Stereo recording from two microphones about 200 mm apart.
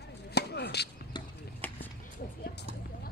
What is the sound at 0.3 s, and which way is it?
Chop, 55° left (ahead or behind).